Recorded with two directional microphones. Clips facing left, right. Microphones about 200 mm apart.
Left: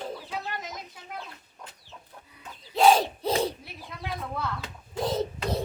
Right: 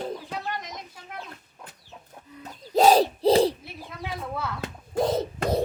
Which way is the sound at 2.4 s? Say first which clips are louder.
Right 2 dB; 40° right (ahead or behind).